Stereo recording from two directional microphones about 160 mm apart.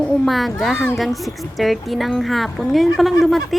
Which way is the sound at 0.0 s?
Centre (ahead or behind).